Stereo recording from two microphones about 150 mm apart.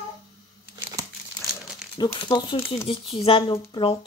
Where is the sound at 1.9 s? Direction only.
30° left (ahead or behind).